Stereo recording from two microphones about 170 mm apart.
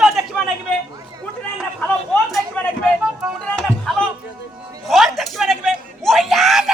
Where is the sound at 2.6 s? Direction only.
10° left (ahead or behind).